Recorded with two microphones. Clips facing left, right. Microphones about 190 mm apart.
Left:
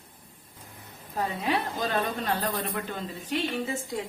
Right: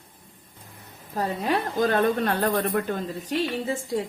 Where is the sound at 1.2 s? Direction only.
45° right (ahead or behind).